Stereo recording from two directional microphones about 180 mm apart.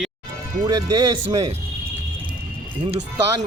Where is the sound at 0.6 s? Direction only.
25° right (ahead or behind).